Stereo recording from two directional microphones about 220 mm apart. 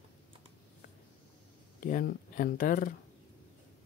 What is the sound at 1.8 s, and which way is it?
Speech, 40° left (ahead or behind).